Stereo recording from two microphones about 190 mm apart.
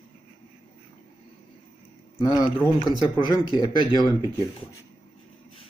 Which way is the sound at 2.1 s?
20° left (ahead or behind).